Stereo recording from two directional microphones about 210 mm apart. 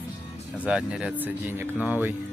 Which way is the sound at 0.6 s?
5° right (ahead or behind).